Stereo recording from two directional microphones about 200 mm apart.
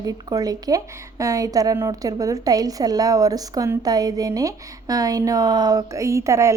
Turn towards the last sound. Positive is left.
turn(degrees=-15)  # may be behind; listen again after turning